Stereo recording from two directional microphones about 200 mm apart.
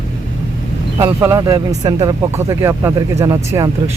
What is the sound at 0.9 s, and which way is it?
Speech, 15° right (ahead or behind).